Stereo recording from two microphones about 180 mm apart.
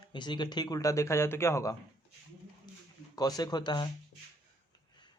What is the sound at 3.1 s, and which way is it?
Speech, 20° left (ahead or behind).